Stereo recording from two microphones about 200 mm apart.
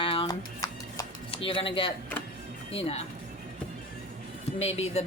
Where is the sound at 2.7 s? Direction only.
30° left (ahead or behind).